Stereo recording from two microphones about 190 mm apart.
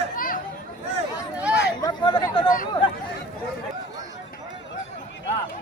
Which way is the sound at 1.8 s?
25° left (ahead or behind).